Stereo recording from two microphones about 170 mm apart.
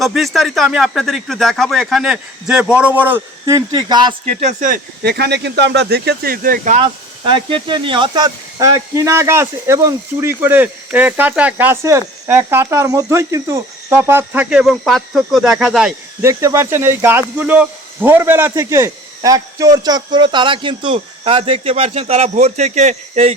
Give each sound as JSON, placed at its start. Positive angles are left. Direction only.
{"t": 0.0, "sound": "speech", "side_deg": 0}
{"t": 3.7, "sound": "speech", "side_deg": -25}
{"t": 4.4, "sound": "speech", "side_deg": -45}
{"t": 5.0, "sound": "speech", "side_deg": -75}
{"t": 7.3, "sound": "speech", "side_deg": -30}
{"t": 16.2, "sound": "speech", "side_deg": -20}